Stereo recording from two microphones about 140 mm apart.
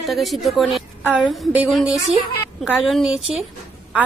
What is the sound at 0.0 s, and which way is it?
A woman's voice, centre (ahead or behind).